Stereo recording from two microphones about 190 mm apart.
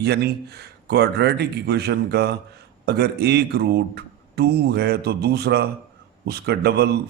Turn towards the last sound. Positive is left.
turn(degrees=-60)  # may be behind; listen again after turning